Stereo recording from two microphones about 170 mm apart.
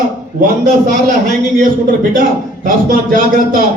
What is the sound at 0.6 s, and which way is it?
Speech, 55° right (ahead or behind).